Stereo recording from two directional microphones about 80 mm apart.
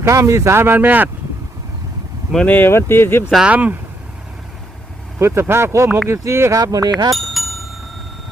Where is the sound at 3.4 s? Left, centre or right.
Centre.